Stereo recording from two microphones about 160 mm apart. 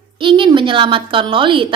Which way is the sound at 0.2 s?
30° right (ahead or behind).